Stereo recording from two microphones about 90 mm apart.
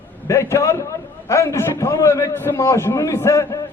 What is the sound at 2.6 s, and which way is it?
Speech, 40° left (ahead or behind).